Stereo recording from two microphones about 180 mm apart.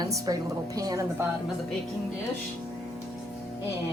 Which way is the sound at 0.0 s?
20° right (ahead or behind).